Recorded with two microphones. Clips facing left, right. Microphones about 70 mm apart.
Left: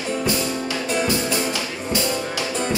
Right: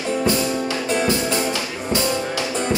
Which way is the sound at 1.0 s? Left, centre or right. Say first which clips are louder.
Right 1 dB; right.